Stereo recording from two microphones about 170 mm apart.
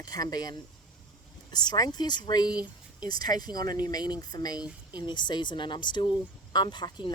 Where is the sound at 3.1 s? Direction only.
25° left (ahead or behind).